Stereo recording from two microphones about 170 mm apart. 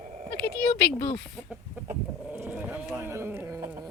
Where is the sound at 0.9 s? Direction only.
55° left (ahead or behind).